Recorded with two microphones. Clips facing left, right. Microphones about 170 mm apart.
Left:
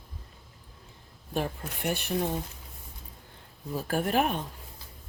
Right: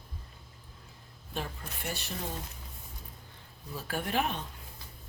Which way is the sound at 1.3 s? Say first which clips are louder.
Left 7 dB; 55° left (ahead or behind).